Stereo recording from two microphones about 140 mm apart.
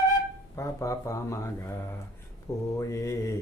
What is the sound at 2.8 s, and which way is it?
Speech, 20° left (ahead or behind).